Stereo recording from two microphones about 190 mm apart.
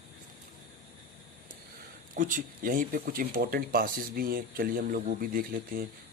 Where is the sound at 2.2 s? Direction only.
45° right (ahead or behind).